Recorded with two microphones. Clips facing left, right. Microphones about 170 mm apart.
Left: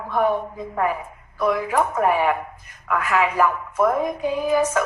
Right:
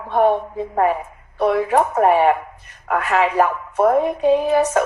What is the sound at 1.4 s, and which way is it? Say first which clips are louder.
Speech: right 4 dB; 35° right (ahead or behind).